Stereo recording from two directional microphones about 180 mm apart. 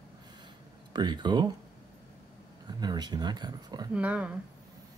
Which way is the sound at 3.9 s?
5° right (ahead or behind).